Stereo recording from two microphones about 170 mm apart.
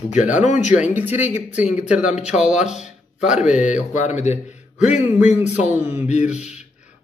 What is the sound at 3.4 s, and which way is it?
Speech, 45° left (ahead or behind).